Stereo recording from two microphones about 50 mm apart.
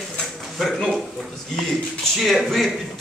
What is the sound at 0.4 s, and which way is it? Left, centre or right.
A man's voice, centre.